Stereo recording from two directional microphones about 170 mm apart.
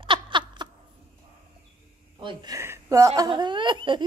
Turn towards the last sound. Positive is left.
turn(degrees=-30)  # may be behind; listen again after turning